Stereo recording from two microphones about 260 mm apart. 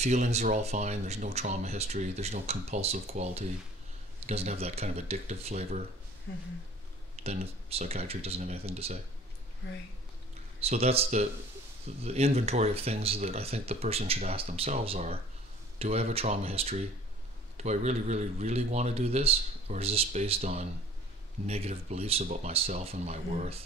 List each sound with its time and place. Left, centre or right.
0.0 s speech: right
6.3 s speech: left
7.2 s speech: right
10.6 s speech: right